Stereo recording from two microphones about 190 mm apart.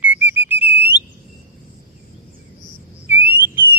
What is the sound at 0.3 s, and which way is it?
Whistle, 10° right (ahead or behind).